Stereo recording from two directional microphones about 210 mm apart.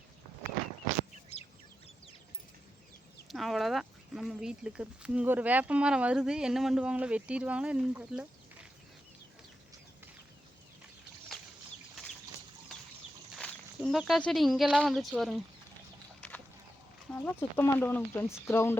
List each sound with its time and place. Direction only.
1.3 s bird: 30° left (ahead or behind)
3.2 s speech: centre (ahead or behind)
13.3 s speech: 5° left (ahead or behind)
16.2 s a sound: 10° left (ahead or behind)
17.2 s speech: 10° left (ahead or behind)